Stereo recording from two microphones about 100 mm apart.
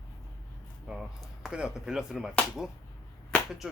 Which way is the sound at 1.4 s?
10° right (ahead or behind).